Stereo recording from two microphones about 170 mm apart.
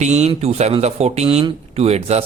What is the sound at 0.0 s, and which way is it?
Speech, 40° right (ahead or behind).